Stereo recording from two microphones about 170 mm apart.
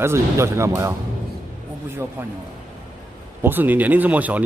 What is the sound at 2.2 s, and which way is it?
Speech, 15° right (ahead or behind).